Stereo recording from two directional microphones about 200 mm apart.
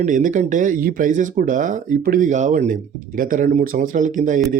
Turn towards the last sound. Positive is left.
turn(degrees=-40)  # may be behind; listen again after turning